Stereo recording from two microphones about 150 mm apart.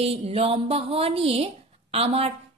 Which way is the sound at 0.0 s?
40° right (ahead or behind).